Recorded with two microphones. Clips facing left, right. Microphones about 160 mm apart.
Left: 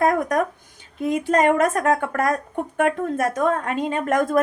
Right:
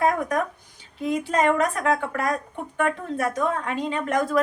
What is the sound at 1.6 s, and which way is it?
A woman's voice, 45° left (ahead or behind).